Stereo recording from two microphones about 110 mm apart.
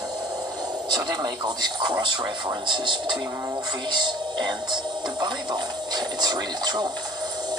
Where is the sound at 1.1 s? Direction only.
40° right (ahead or behind).